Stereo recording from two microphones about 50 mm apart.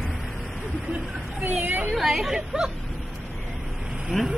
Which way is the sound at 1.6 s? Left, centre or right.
Right.